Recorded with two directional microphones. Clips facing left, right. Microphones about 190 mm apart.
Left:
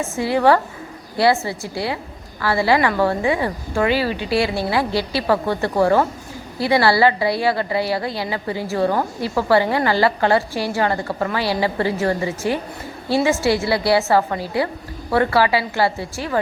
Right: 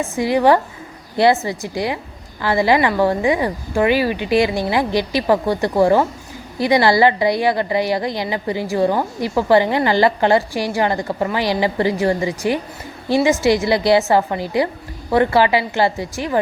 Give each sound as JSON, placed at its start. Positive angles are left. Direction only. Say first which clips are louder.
{"t": 0.0, "sound": "a woman's voice", "louder": "right 2 dB", "side_deg": -15}